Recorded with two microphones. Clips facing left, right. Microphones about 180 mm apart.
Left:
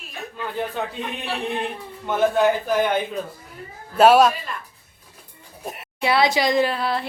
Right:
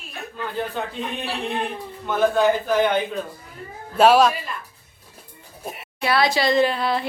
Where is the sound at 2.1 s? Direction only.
20° left (ahead or behind).